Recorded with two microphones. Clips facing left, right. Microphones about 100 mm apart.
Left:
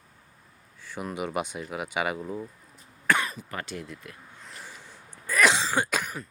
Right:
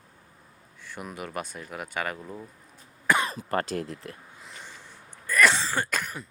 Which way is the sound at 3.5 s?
40° right (ahead or behind).